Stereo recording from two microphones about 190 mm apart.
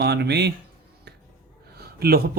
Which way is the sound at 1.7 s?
55° right (ahead or behind).